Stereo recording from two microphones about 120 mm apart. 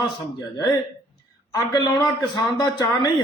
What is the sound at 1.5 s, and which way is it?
A man's voice, 35° left (ahead or behind).